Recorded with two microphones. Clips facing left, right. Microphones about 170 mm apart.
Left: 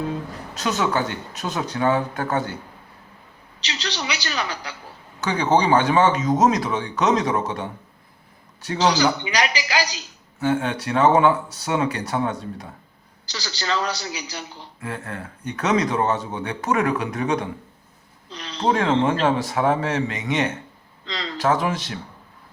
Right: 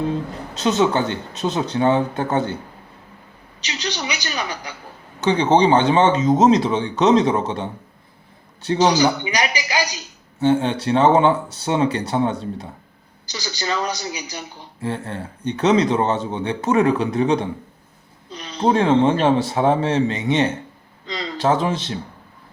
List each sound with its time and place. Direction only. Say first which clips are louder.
0.5 s speech: right 5 dB; 25° right (ahead or behind)
3.6 s a woman's voice: right 2 dB; 20° right (ahead or behind)
10.4 s a woman's voice: right 5 dB; 30° right (ahead or behind)
14.8 s speech: right 5 dB; 30° right (ahead or behind)
18.6 s speech: right 4 dB; 25° right (ahead or behind)